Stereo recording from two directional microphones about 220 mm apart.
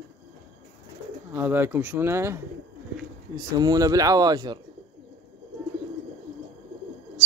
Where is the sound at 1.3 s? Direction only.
10° right (ahead or behind).